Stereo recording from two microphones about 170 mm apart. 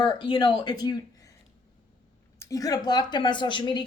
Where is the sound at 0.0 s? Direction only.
30° left (ahead or behind).